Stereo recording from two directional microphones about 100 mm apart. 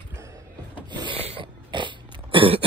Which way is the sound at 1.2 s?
80° right.